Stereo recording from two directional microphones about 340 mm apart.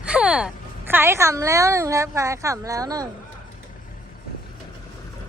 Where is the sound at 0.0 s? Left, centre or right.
Centre.